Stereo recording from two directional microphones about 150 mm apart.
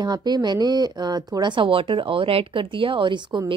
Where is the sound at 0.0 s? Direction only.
25° right (ahead or behind).